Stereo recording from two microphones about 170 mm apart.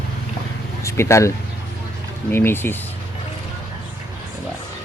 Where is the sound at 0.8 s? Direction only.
15° left (ahead or behind).